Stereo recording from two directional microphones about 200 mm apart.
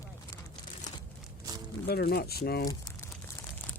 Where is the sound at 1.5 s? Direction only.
20° right (ahead or behind).